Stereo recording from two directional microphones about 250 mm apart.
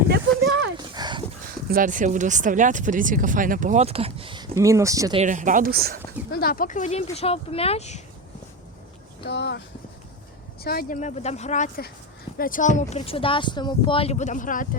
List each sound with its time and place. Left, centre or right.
0.1 s a sound: right
0.9 s horse: centre
1.6 s speech: right; by 5.2 s centre
5.2 s speech: right
6.3 s speech: left
9.2 s speech: left
10.6 s speech: left